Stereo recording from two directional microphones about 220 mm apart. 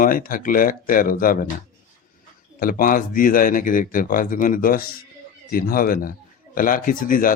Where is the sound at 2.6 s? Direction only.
40° left (ahead or behind).